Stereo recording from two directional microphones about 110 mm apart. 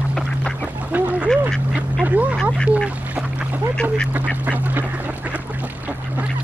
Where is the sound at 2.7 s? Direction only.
5° right (ahead or behind).